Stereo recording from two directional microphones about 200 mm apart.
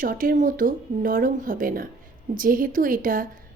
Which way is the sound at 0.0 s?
45° right (ahead or behind).